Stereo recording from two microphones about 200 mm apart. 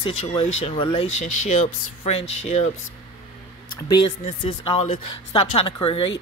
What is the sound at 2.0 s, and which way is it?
Speech, 30° left (ahead or behind).